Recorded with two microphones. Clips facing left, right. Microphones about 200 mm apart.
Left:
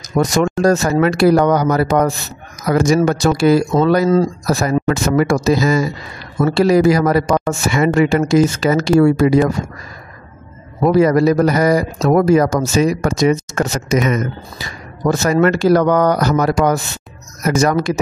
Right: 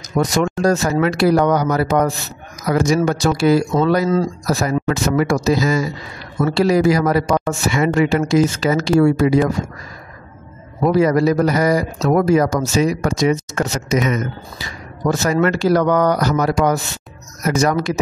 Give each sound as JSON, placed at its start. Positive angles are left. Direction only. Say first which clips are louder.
{"t": 0.1, "sound": "speech", "louder": "left 2 dB", "side_deg": 45}
{"t": 10.8, "sound": "speech", "louder": "left 2 dB", "side_deg": 50}
{"t": 15.3, "sound": "speech", "louder": "left 4 dB", "side_deg": 50}